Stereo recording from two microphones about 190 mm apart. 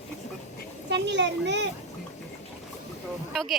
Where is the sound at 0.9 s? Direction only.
65° right (ahead or behind).